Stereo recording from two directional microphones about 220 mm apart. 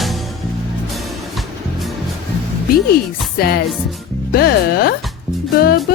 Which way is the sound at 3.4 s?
45° left (ahead or behind).